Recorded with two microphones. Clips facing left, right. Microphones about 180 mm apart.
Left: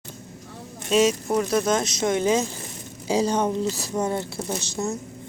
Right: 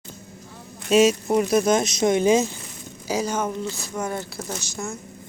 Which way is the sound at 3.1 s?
30° left (ahead or behind).